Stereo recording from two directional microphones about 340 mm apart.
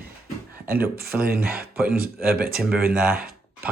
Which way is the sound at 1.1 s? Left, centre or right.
Centre.